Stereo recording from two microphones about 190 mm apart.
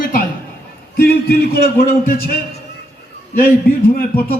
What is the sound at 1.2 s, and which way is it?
A man's voice, 50° left (ahead or behind).